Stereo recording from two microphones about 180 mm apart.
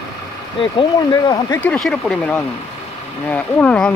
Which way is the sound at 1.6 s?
5° left (ahead or behind).